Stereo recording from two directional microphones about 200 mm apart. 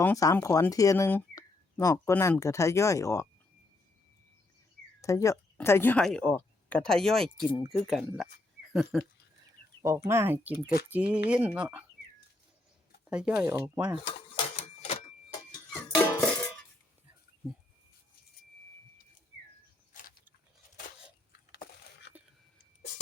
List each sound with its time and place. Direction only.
0.0 s speech: 15° left (ahead or behind)
4.9 s speech: 15° left (ahead or behind); by 9.0 s centre (ahead or behind)
9.8 s speech: 15° right (ahead or behind)
13.1 s speech: 5° right (ahead or behind)
14.0 s cash register: 30° left (ahead or behind)
15.7 s music: 10° left (ahead or behind)
19.9 s a sound: 40° left (ahead or behind)